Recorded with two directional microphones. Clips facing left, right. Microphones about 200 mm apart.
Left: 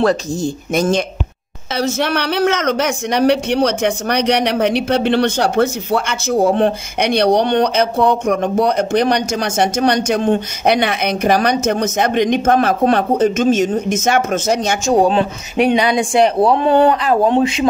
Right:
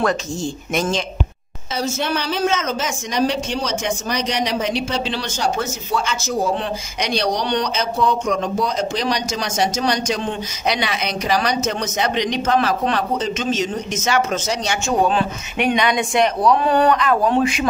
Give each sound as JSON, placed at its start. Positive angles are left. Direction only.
{"t": 0.0, "sound": "speech", "side_deg": 35}
{"t": 1.7, "sound": "speech", "side_deg": 70}
{"t": 14.9, "sound": "speech", "side_deg": 30}